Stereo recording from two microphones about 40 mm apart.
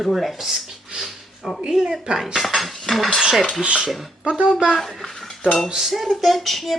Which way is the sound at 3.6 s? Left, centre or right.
Right.